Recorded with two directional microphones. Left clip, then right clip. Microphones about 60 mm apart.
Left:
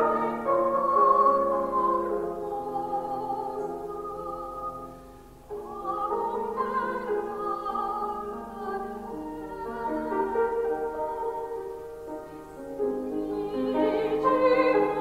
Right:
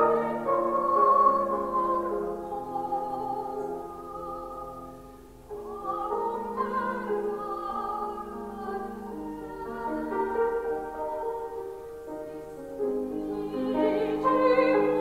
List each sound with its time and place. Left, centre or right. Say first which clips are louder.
0.1 s music: even; centre
5.9 s music: left 1 dB; centre
9.8 s music: left 1 dB; centre
13.3 s music: left 3 dB; right